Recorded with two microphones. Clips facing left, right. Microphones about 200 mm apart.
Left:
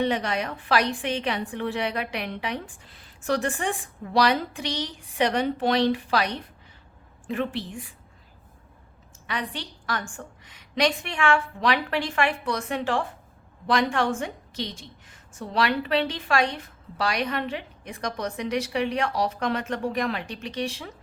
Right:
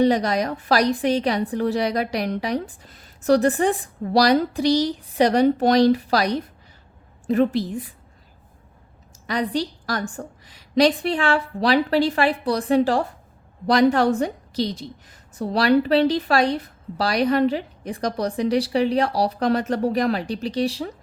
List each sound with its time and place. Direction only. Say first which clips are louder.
0.0 s a woman's voice: right 7 dB; 40° right (ahead or behind)
9.2 s a woman's voice: right 9 dB; 40° right (ahead or behind)